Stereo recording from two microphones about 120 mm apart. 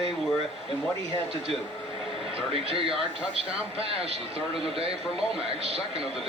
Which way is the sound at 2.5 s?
50° right (ahead or behind).